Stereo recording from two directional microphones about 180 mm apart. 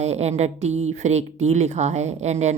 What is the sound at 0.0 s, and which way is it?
A woman's voice, 35° right (ahead or behind).